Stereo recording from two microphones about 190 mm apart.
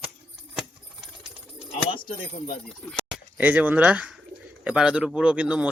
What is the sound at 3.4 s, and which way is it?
A man's voice, 10° right (ahead or behind).